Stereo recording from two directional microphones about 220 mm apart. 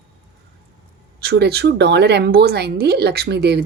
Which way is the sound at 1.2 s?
50° right (ahead or behind).